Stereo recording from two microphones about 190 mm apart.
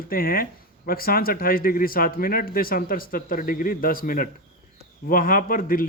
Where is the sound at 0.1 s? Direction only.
50° left (ahead or behind).